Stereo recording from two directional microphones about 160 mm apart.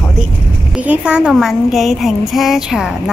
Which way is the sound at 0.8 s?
5° right (ahead or behind).